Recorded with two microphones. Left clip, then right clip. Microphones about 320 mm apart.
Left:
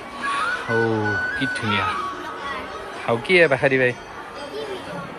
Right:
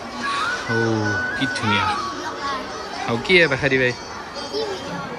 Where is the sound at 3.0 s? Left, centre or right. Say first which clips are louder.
Even; centre.